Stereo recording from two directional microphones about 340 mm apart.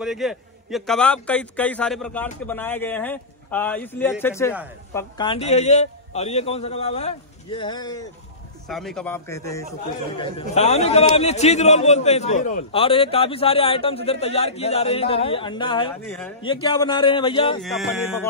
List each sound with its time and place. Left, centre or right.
0.0 s a man's voice: centre
8.6 s a man's voice: centre
17.6 s a man's voice: centre